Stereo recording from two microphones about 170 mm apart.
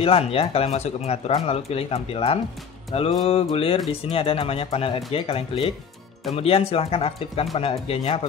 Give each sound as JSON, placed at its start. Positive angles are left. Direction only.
{"t": 0.0, "sound": "speech", "side_deg": 35}
{"t": 2.9, "sound": "music", "side_deg": 35}
{"t": 3.5, "sound": "speech", "side_deg": 30}